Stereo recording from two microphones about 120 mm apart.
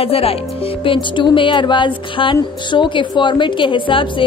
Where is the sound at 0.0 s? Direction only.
55° left (ahead or behind).